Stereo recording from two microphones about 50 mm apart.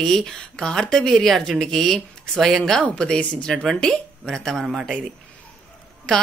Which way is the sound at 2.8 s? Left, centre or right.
Left.